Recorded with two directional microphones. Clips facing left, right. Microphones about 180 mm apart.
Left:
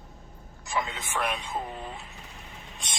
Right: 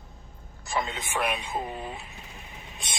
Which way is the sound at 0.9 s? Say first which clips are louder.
Right 2 dB; 15° right (ahead or behind).